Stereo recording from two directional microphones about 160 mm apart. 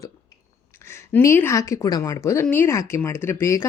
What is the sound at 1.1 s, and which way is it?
Speech, 15° left (ahead or behind).